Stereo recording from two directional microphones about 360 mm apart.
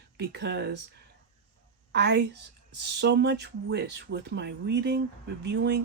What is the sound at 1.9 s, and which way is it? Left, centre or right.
Speech, right.